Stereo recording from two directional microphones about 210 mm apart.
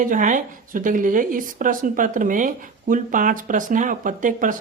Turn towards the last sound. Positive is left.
turn(degrees=-40)  # may be behind; listen again after turning